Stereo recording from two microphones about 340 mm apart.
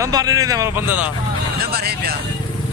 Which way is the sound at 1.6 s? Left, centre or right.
Right.